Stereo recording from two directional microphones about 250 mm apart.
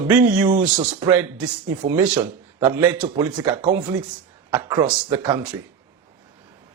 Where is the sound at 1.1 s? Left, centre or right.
Centre.